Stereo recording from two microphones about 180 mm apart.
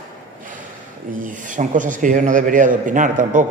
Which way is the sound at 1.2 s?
45° right (ahead or behind).